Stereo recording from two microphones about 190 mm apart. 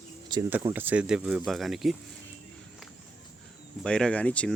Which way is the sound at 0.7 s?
10° right (ahead or behind).